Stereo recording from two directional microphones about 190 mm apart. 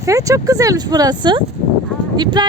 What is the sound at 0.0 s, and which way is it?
Speech, 15° right (ahead or behind).